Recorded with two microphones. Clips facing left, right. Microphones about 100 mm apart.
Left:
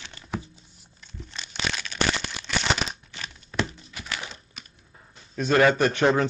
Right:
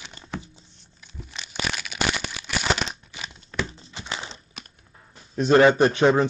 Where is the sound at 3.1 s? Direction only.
10° right (ahead or behind).